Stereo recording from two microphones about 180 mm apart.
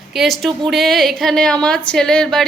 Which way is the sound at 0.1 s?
Centre (ahead or behind).